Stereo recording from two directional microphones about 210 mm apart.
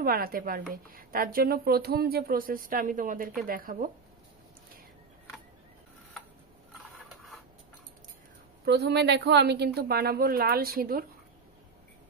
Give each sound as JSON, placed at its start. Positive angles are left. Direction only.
{"t": 0.0, "sound": "a woman's voice", "side_deg": -45}
{"t": 8.6, "sound": "a woman's voice", "side_deg": -50}